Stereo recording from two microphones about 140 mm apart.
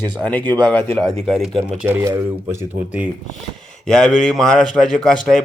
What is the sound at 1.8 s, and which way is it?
Speech, 15° right (ahead or behind).